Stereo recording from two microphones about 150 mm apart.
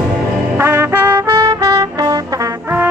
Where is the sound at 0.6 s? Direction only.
20° right (ahead or behind).